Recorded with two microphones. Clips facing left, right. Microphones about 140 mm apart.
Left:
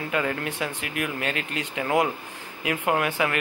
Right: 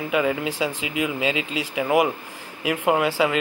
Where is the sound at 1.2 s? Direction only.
90° right.